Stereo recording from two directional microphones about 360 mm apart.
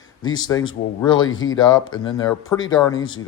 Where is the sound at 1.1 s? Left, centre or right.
Left.